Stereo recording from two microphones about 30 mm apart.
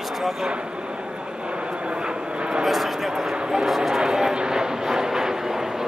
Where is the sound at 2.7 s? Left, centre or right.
Centre.